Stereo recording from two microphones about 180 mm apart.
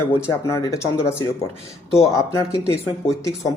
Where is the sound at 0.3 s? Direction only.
15° left (ahead or behind).